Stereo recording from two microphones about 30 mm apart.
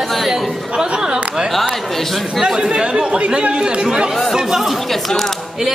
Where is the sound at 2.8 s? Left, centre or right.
Right.